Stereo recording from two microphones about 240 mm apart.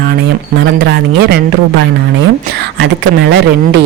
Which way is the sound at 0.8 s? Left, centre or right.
Right.